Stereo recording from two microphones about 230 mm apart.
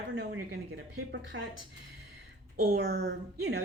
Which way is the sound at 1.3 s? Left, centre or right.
Right.